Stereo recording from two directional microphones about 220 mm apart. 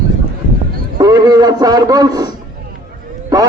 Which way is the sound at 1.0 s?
15° right (ahead or behind).